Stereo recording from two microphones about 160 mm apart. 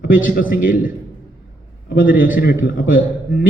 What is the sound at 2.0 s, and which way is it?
Speech, 60° left (ahead or behind).